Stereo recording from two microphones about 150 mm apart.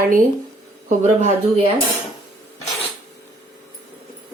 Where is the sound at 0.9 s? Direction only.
50° right (ahead or behind).